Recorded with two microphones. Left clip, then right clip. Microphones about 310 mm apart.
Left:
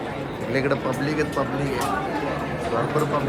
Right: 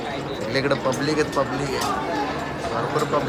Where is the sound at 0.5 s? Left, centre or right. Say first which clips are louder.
Right 1 dB; centre.